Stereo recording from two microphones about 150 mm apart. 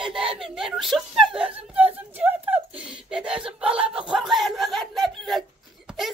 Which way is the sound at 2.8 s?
5° right (ahead or behind).